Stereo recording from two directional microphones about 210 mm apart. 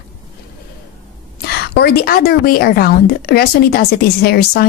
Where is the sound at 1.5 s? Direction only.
50° left (ahead or behind).